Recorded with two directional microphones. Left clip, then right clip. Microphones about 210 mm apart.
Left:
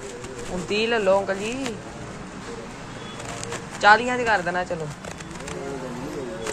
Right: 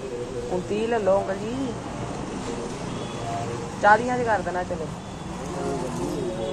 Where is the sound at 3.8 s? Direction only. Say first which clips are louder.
Left 2 dB; 35° left (ahead or behind).